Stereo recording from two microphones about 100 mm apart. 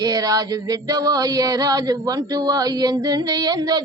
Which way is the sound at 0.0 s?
40° right (ahead or behind).